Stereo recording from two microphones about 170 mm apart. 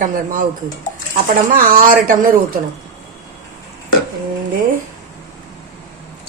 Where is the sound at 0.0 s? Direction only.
55° right (ahead or behind).